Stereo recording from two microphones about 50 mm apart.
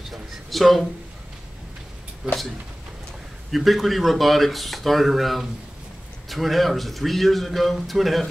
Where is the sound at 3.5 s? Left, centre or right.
Centre.